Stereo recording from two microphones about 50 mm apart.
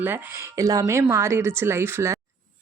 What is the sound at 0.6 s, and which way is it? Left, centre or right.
Speech, right.